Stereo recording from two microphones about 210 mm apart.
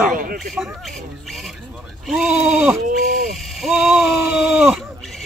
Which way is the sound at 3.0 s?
40° right (ahead or behind).